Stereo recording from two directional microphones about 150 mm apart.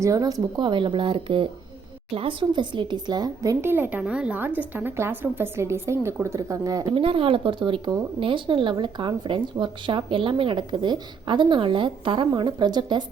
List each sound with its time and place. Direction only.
0.0 s a woman's voice: 25° right (ahead or behind)
6.9 s a woman's voice: 35° right (ahead or behind)